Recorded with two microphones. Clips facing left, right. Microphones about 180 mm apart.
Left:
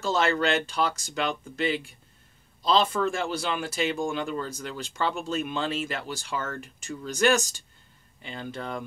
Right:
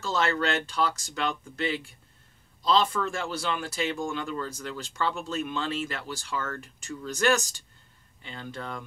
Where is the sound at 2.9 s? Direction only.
15° left (ahead or behind).